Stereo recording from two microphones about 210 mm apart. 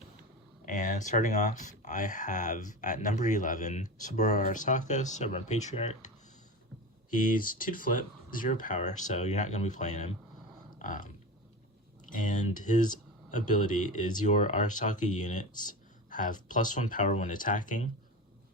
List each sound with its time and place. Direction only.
0.6 s speech: 40° left (ahead or behind)
7.1 s speech: 40° left (ahead or behind)
10.8 s a sound: 40° left (ahead or behind)
12.1 s speech: 35° left (ahead or behind)